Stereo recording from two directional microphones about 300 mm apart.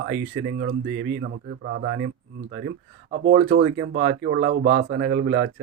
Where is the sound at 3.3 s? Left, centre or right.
Right.